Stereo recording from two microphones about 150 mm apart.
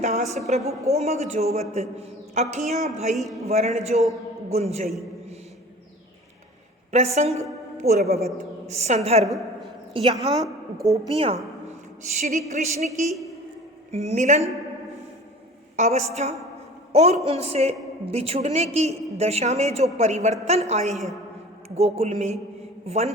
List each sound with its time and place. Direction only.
0.0 s a woman's voice: 50° right (ahead or behind)
0.6 s a woman's voice: 20° right (ahead or behind)
0.9 s a woman's voice: 45° right (ahead or behind)
6.9 s a woman's voice: 45° right (ahead or behind)
9.2 s a sound: centre (ahead or behind)
9.9 s a woman's voice: 35° right (ahead or behind)
12.0 s a woman's voice: 55° right (ahead or behind)
15.7 s a woman's voice: 55° right (ahead or behind)